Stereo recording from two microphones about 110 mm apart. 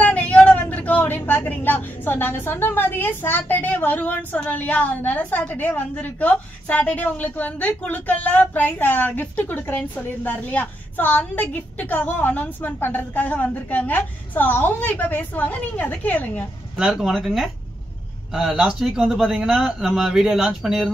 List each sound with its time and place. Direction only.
0.0 s a woman's voice: 15° left (ahead or behind)
16.7 s speech: 5° right (ahead or behind)